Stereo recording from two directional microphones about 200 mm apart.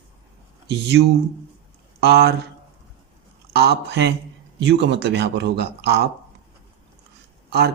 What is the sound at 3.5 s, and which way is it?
Speech, 55° right (ahead or behind).